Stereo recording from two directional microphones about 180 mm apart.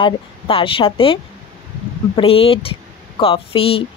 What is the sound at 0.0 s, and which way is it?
Speech, 30° left (ahead or behind).